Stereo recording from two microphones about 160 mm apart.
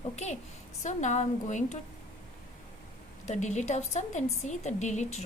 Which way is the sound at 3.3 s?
50° left (ahead or behind).